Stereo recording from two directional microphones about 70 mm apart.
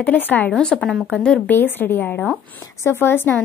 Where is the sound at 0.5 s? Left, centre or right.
Centre.